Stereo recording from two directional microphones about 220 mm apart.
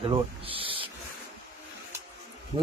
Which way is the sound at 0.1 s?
25° right (ahead or behind).